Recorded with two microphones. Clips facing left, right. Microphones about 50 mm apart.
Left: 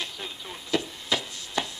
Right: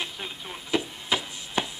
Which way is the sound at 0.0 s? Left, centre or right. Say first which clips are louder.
Right 1 dB; centre.